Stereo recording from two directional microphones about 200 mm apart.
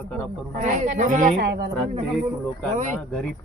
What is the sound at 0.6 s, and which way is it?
Speech, 40° right (ahead or behind).